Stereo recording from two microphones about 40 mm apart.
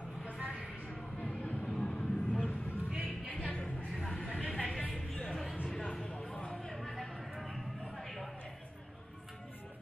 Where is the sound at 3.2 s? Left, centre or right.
Left.